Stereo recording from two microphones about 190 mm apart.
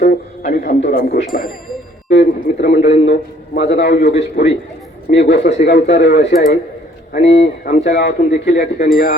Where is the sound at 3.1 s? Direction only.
60° left (ahead or behind).